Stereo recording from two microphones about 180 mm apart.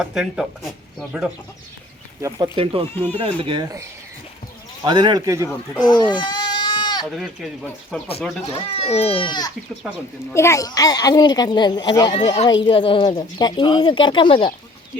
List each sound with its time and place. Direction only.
0.0 s speech: 5° right (ahead or behind)
2.2 s a man's voice: 25° right (ahead or behind)
2.9 s speech: 10° left (ahead or behind)
3.2 s a man's voice: 30° right (ahead or behind)
5.9 s goat: 25° left (ahead or behind)
7.0 s speech: 5° right (ahead or behind)
8.5 s speech: 35° left (ahead or behind)
9.8 s speech: 5° right (ahead or behind)
10.3 s a child's voice: 15° left (ahead or behind)